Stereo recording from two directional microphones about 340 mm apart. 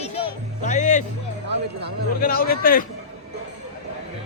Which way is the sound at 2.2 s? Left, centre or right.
Left.